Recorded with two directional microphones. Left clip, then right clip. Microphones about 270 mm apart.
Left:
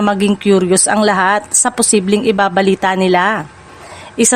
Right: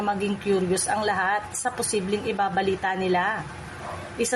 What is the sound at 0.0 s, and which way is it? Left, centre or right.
A woman's voice, left.